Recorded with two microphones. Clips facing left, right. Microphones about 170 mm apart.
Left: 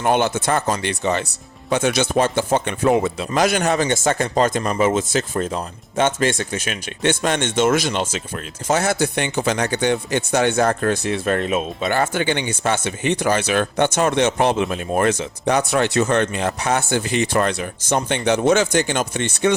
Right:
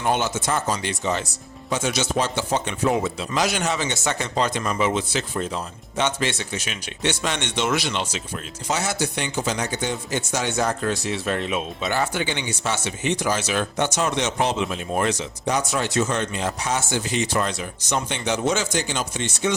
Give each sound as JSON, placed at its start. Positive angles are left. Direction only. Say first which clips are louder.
{"t": 0.0, "sound": "a man's voice", "louder": "left 5 dB", "side_deg": 60}